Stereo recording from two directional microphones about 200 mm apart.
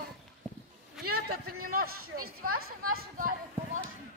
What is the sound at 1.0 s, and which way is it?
Speech, centre (ahead or behind).